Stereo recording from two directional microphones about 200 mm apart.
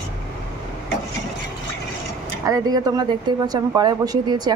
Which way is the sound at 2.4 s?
15° right (ahead or behind).